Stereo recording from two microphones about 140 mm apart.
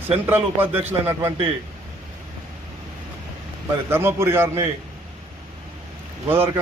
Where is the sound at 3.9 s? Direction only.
15° right (ahead or behind).